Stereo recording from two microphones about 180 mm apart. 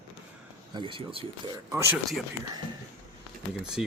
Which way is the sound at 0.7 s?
30° right (ahead or behind).